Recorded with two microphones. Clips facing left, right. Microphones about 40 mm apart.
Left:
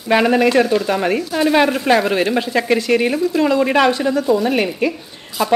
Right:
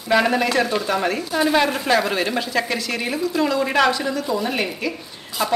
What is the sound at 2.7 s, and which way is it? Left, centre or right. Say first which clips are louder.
Speech: left 9 dB; left.